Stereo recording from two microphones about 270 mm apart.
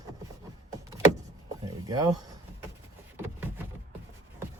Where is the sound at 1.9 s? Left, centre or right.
Centre.